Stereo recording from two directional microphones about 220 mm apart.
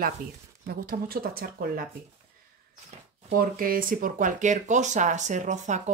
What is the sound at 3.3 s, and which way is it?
Speech, 40° right (ahead or behind).